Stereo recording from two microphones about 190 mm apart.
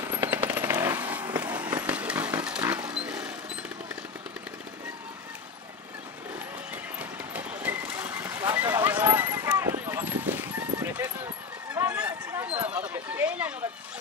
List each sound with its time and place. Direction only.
0.0 s vehicle: 10° right (ahead or behind)
1.3 s a sound: 10° right (ahead or behind)
1.8 s horse: 5° right (ahead or behind)
6.7 s horse: 10° right (ahead or behind)
11.8 s run: 10° right (ahead or behind)
12.6 s a sound: 5° right (ahead or behind)